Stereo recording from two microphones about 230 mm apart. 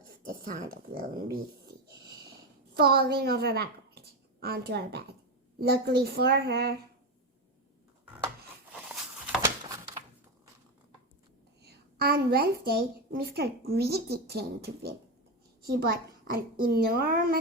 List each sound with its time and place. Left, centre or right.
0.3 s speech: right
2.7 s a woman's voice: right
9.2 s a sound: centre
11.6 s a woman's voice: right